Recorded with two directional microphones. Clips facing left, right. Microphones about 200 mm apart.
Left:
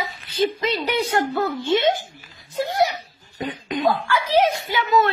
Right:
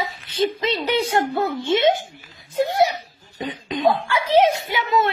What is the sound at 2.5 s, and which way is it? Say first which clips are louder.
A woman's voice: right 2 dB; 25° right (ahead or behind).